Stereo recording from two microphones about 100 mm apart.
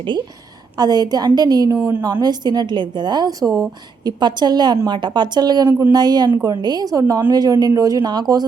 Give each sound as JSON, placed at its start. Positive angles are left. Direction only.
{"t": 0.8, "sound": "a woman's voice", "side_deg": -45}
{"t": 3.4, "sound": "speech", "side_deg": 5}
{"t": 4.0, "sound": "a woman's voice", "side_deg": -50}